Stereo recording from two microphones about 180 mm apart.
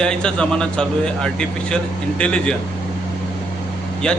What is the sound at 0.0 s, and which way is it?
A man's voice, 5° left (ahead or behind).